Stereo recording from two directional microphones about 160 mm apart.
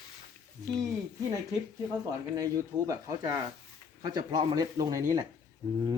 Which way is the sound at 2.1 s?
20° right (ahead or behind).